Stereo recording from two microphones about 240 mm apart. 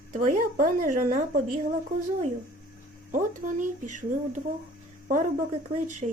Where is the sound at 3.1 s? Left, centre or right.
Right.